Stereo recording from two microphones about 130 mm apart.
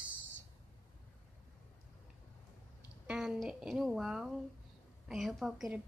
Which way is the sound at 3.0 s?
5° right (ahead or behind).